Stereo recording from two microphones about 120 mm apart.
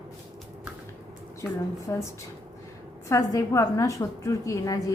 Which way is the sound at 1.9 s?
25° left (ahead or behind).